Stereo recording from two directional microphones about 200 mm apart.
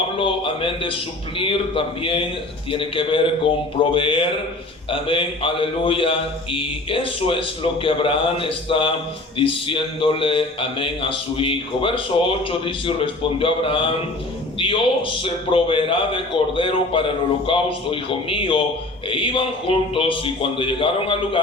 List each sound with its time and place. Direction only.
0.2 s a man's voice: 25° left (ahead or behind)